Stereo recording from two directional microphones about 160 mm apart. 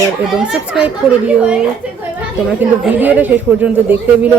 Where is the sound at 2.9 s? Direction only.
10° right (ahead or behind).